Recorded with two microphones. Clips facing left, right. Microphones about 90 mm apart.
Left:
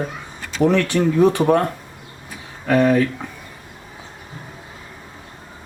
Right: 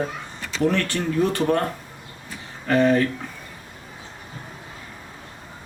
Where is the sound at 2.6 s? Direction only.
5° left (ahead or behind).